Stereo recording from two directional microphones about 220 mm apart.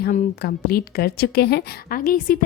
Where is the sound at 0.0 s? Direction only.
40° left (ahead or behind).